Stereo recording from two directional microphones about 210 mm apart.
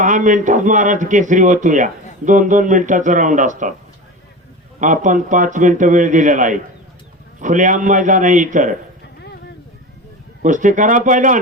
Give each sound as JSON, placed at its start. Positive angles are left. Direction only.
{"t": 0.0, "sound": "a man's voice", "side_deg": -35}
{"t": 4.8, "sound": "a man's voice", "side_deg": -35}
{"t": 10.4, "sound": "a man's voice", "side_deg": -35}